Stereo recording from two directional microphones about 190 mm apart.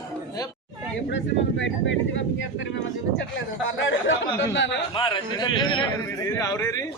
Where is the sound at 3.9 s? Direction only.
75° left (ahead or behind).